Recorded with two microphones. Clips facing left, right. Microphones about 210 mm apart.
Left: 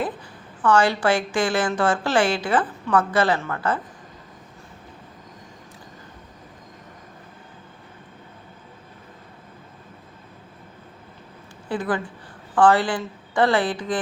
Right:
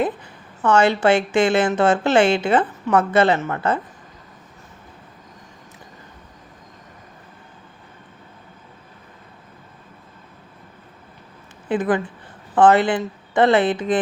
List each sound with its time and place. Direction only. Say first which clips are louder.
0.6 s a woman's voice: right 3 dB; 25° right (ahead or behind)
11.7 s a woman's voice: right 5 dB; 20° right (ahead or behind)